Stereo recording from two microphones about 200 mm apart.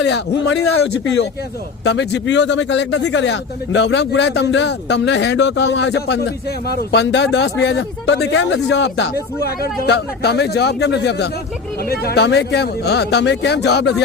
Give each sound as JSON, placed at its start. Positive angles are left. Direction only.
{"t": 0.0, "sound": "speech", "side_deg": 60}
{"t": 1.8, "sound": "speech", "side_deg": 60}